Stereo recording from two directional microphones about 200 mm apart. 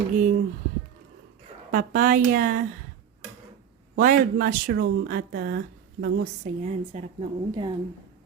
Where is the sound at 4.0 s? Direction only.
45° right (ahead or behind).